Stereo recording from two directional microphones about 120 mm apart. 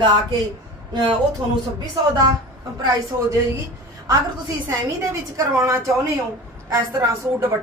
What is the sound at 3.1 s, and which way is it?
Speech, 20° right (ahead or behind).